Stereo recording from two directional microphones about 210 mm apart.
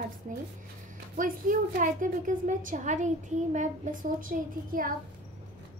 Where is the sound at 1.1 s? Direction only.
40° right (ahead or behind).